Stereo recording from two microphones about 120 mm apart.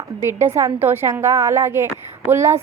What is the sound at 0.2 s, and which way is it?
A woman's voice, 20° right (ahead or behind).